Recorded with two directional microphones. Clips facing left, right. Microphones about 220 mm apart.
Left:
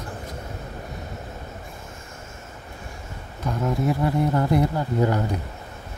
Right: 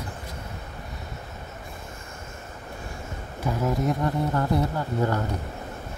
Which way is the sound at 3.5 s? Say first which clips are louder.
Even; 10° right (ahead or behind).